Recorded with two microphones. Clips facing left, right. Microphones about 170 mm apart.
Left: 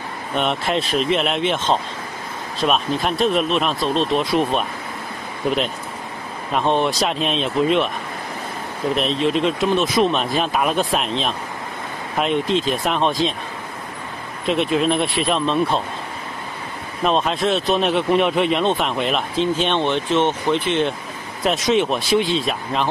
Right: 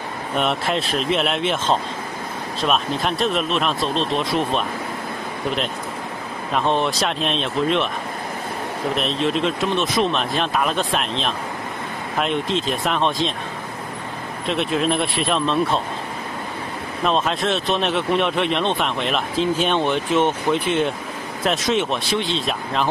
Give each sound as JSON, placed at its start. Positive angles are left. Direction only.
{"t": 0.4, "sound": "speech", "side_deg": 0}
{"t": 6.5, "sound": "speech", "side_deg": 0}
{"t": 8.9, "sound": "speech", "side_deg": 0}
{"t": 14.5, "sound": "speech", "side_deg": 0}
{"t": 17.0, "sound": "speech", "side_deg": 0}